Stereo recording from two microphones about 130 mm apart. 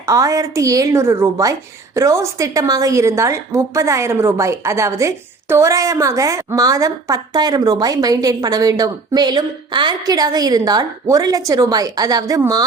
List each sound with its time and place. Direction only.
0.0 s a woman's voice: 25° right (ahead or behind)